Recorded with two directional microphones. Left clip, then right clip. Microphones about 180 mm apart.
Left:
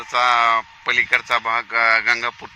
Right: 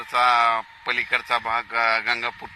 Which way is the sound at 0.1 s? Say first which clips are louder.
Left 2 dB; 45° left (ahead or behind).